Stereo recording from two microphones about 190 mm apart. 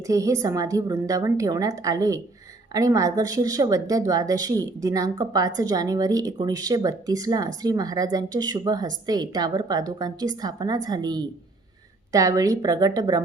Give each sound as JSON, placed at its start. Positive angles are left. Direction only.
{"t": 0.0, "sound": "a woman's voice", "side_deg": -15}